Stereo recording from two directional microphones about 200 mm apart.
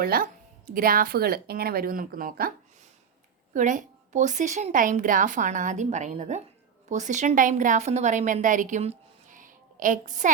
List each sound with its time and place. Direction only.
0.0 s speech: 50° right (ahead or behind)
3.5 s a woman's voice: 40° right (ahead or behind)